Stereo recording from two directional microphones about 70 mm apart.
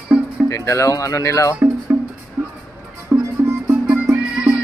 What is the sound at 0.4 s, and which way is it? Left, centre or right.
Speech, left.